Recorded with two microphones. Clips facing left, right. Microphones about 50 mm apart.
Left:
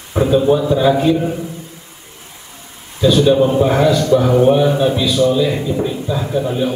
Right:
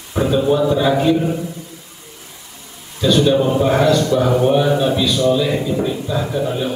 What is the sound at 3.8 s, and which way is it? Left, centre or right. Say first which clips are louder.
A man's voice: left 2 dB; centre.